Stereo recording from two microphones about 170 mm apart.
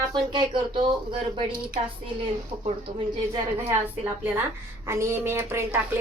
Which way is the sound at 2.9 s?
45° right (ahead or behind).